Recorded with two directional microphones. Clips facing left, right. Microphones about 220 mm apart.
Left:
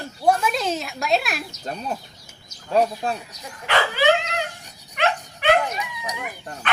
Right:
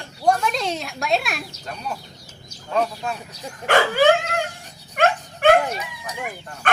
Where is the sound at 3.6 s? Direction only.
50° right (ahead or behind).